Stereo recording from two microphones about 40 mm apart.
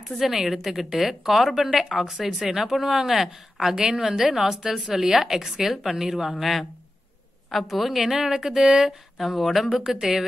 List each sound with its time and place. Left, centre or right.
0.2 s a woman's voice: centre
7.5 s a woman's voice: centre
8.6 s speech: centre
9.2 s speech: centre
9.8 s a woman's voice: centre